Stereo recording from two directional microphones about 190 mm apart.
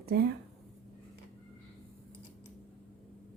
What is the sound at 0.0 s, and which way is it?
Speech, 55° right (ahead or behind).